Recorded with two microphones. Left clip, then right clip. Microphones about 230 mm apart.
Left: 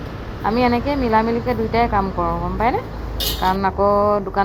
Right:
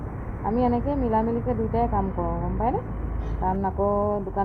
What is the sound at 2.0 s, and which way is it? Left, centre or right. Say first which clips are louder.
Speech: left 7 dB; left.